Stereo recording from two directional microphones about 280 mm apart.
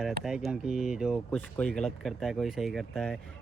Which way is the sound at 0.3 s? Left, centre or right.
Centre.